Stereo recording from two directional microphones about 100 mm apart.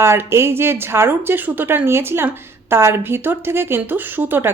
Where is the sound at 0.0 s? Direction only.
25° right (ahead or behind).